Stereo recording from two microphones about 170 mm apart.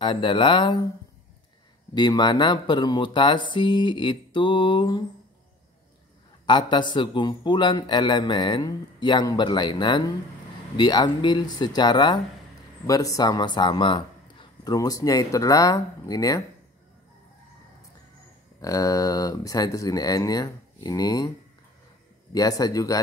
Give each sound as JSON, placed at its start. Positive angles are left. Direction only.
{"t": 0.0, "sound": "a man's voice", "side_deg": 30}
{"t": 2.0, "sound": "a man's voice", "side_deg": 25}
{"t": 6.4, "sound": "a man's voice", "side_deg": 25}
{"t": 18.6, "sound": "a man's voice", "side_deg": 20}
{"t": 22.3, "sound": "a man's voice", "side_deg": 20}